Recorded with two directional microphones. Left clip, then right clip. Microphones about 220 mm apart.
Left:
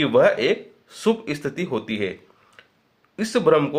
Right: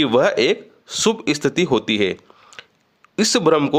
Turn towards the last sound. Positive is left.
turn(degrees=-45)  # may be behind; listen again after turning